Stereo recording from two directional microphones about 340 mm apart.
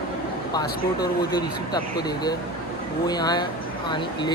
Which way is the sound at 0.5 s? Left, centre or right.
Centre.